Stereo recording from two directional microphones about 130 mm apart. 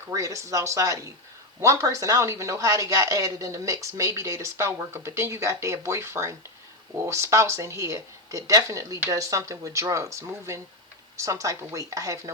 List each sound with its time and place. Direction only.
0.1 s speech: 25° right (ahead or behind)